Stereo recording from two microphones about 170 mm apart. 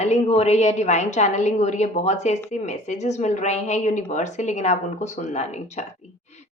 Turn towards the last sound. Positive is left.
turn(degrees=40)  # may be behind; listen again after turning